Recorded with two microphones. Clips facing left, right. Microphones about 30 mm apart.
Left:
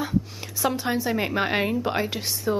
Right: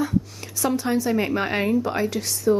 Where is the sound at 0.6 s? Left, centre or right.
Centre.